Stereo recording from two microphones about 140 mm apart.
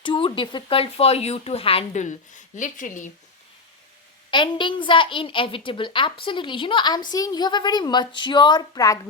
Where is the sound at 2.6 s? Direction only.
65° left (ahead or behind).